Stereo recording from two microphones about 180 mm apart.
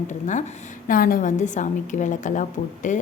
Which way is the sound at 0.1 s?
40° left (ahead or behind).